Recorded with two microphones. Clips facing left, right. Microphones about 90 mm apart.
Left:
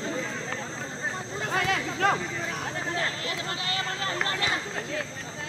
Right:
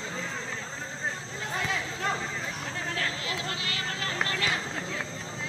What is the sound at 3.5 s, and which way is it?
Vehicle, 30° left (ahead or behind).